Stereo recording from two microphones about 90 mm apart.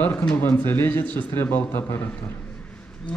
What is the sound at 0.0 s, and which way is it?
Speech, 20° left (ahead or behind).